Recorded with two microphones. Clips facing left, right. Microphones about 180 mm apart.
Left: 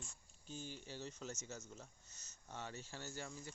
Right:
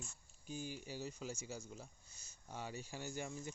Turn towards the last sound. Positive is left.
turn(degrees=-15)  # may be behind; listen again after turning